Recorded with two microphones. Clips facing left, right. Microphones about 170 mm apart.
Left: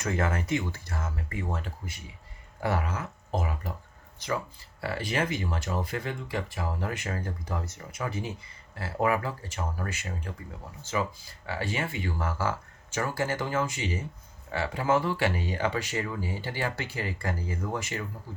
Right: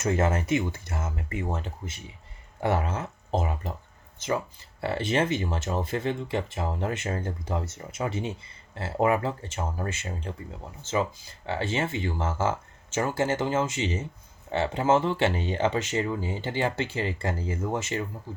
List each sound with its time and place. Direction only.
0.0 s speech: 25° right (ahead or behind)
4.8 s speech: 25° right (ahead or behind)